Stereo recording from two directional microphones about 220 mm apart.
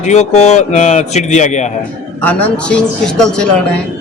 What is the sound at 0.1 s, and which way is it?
Speech, 30° left (ahead or behind).